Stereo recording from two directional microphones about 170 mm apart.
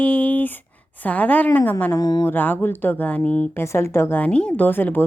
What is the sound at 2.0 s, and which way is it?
Speech, 25° left (ahead or behind).